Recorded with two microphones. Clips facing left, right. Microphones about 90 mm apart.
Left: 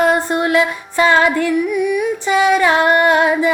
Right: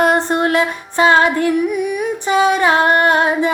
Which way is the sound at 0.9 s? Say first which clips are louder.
Right 1 dB; 25° right (ahead or behind).